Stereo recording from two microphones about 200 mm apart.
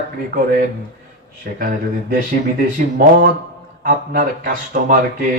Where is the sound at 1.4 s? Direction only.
50° right (ahead or behind).